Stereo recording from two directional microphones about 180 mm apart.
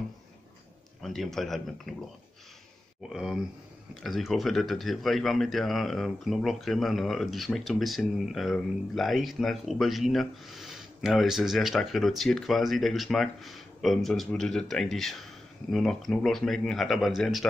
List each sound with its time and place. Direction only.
1.0 s speech: centre (ahead or behind)
3.1 s speech: centre (ahead or behind)